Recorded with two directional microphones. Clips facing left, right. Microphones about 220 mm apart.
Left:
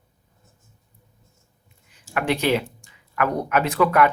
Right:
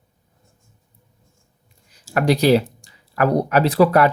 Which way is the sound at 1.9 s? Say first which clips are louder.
Right 5 dB; 40° right (ahead or behind).